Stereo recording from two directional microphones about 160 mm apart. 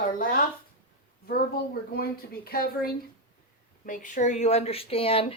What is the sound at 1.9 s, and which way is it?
Speech, 70° left (ahead or behind).